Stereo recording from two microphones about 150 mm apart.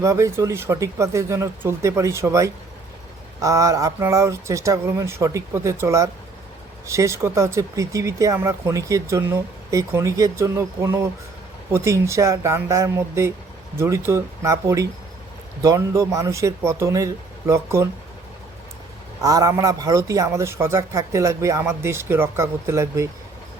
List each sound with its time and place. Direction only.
0.0 s speech: 20° right (ahead or behind)
19.2 s speech: 25° right (ahead or behind)